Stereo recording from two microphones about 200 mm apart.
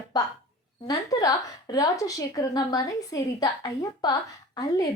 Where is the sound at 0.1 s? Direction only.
20° left (ahead or behind).